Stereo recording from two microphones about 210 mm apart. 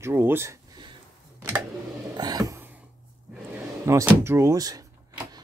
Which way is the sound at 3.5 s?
15° right (ahead or behind).